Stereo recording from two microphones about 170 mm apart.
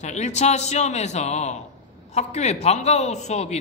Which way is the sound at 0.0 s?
40° left (ahead or behind).